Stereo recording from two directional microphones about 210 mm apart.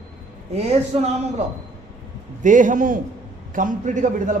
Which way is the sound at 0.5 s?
30° right (ahead or behind).